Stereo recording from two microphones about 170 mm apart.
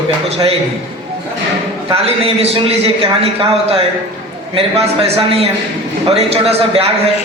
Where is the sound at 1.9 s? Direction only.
35° right (ahead or behind).